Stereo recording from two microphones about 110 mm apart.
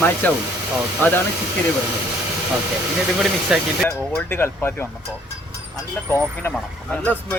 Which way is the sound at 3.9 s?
20° left (ahead or behind).